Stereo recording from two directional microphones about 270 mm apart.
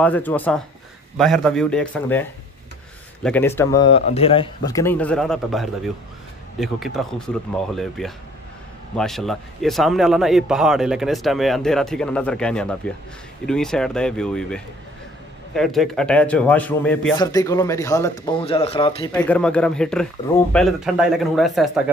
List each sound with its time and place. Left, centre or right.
0.0 s a man's voice: centre
3.3 s a man's voice: centre
19.1 s a man's voice: centre